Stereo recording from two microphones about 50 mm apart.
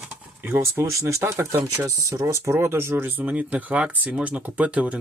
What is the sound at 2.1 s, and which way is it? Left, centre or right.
Speech, right.